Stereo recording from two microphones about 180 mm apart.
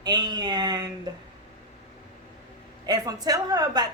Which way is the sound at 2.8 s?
20° right (ahead or behind).